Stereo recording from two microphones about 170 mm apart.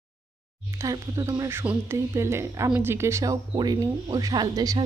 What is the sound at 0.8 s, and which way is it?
Speech, 20° right (ahead or behind).